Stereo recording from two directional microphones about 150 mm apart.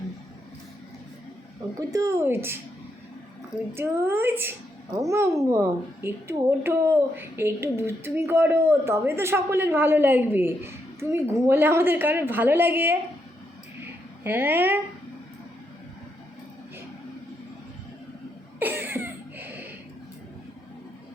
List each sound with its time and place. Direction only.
1.9 s speech: 20° right (ahead or behind)
3.8 s speech: 15° right (ahead or behind)
14.3 s speech: 15° right (ahead or behind)
18.6 s cough: 15° right (ahead or behind)